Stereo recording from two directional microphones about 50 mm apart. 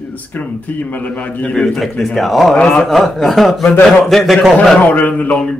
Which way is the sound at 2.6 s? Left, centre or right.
Left.